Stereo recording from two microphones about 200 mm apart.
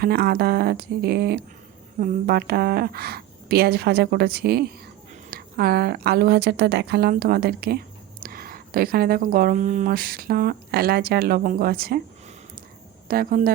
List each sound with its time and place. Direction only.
0.0 s speech: 50° right (ahead or behind)
13.1 s speech: 45° right (ahead or behind)